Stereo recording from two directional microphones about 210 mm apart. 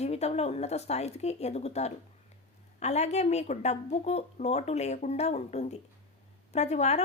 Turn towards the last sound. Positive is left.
turn(degrees=30)  # may be behind; listen again after turning